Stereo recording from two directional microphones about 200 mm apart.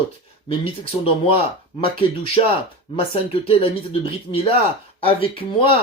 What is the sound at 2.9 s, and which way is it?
Speech, 30° left (ahead or behind).